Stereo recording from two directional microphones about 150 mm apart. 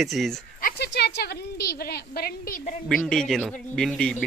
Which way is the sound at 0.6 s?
80° left.